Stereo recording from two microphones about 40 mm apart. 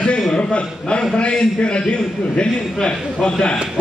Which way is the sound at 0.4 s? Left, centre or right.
Left.